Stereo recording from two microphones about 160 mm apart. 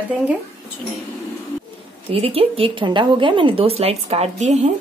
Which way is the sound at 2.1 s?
35° right (ahead or behind).